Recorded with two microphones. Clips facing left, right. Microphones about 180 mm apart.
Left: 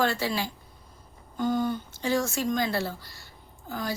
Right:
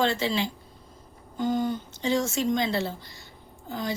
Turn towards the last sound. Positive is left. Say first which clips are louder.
# right 1 dB
turn(degrees=-20)  # may be behind; listen again after turning